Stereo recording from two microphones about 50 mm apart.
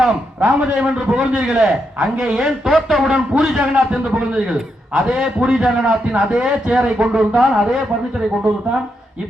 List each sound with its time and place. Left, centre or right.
0.3 s a man's voice: right
2.3 s a man's voice: centre